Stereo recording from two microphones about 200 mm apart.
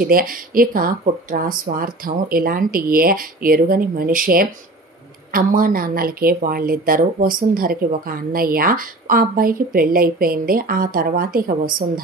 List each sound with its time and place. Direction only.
0.0 s speech: 45° right (ahead or behind)